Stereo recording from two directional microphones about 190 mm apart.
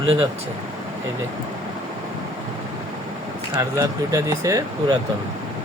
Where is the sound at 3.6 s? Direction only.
15° right (ahead or behind).